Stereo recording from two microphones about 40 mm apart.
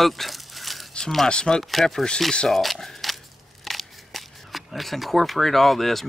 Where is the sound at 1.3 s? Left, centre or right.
Left.